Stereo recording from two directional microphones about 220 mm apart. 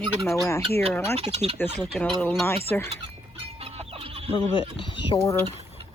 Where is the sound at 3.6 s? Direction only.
25° right (ahead or behind).